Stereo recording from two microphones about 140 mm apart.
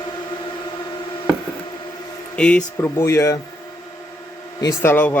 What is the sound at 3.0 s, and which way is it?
Speech, 20° left (ahead or behind).